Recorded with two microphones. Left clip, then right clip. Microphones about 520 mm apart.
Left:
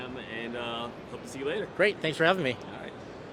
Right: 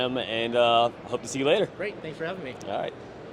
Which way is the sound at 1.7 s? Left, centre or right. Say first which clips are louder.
Left 7 dB; left.